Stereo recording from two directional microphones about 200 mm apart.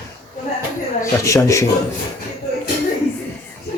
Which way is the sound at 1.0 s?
15° left (ahead or behind).